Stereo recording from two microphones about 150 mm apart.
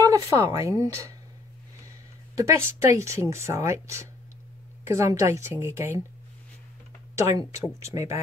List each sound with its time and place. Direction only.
0.0 s speech: 25° right (ahead or behind)
2.3 s speech: 20° right (ahead or behind)
7.9 s speech: 20° right (ahead or behind)